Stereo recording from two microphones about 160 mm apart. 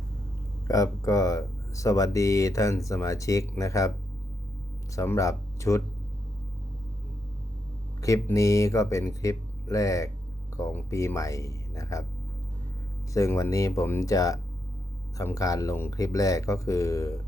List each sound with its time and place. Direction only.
0.7 s speech: 20° left (ahead or behind)
4.9 s speech: 20° left (ahead or behind)
8.0 s speech: 20° left (ahead or behind)
13.1 s speech: 20° left (ahead or behind)